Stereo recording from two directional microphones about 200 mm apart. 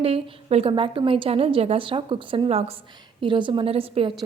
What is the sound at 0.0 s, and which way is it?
A woman's voice, 30° right (ahead or behind).